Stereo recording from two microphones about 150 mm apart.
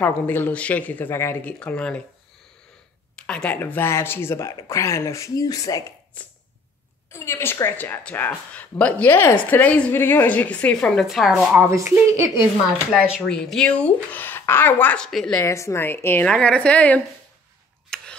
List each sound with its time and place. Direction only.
0.0 s speech: 10° left (ahead or behind)
3.2 s speech: 5° left (ahead or behind); by 5.9 s 20° left (ahead or behind)
7.1 s speech: 15° left (ahead or behind); by 11.3 s centre (ahead or behind)
11.5 s a woman's voice: 20° right (ahead or behind)
13.2 s a woman's voice: 5° left (ahead or behind)
15.3 s speech: 20° left (ahead or behind)
17.8 s a sound: 5° left (ahead or behind)